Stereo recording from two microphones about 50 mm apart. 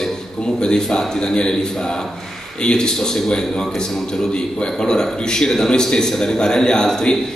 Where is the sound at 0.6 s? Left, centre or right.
Centre.